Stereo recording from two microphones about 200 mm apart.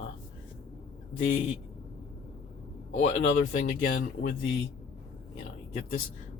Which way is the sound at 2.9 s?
40° left (ahead or behind).